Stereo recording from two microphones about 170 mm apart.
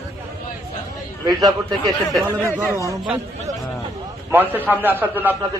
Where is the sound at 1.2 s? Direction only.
20° right (ahead or behind).